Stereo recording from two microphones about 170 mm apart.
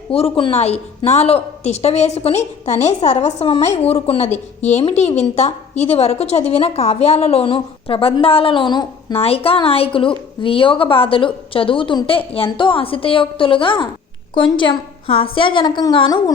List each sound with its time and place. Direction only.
0.1 s a woman's voice: 35° left (ahead or behind)